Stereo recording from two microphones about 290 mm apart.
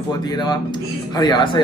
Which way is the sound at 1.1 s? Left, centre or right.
Centre.